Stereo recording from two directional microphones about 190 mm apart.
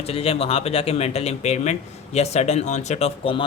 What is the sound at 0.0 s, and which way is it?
Speech, 30° left (ahead or behind).